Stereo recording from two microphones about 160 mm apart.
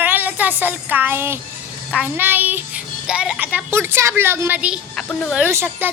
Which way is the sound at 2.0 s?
10° right (ahead or behind).